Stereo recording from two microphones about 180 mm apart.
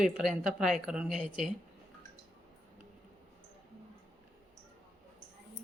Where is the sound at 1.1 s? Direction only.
45° right (ahead or behind).